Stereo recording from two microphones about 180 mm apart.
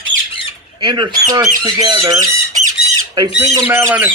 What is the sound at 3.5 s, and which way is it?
Speech, 15° right (ahead or behind).